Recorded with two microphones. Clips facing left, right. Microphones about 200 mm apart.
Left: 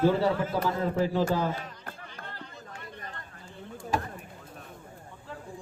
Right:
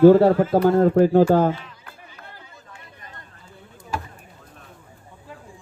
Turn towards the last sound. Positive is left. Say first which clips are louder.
# even
turn(degrees=-10)  # may be behind; listen again after turning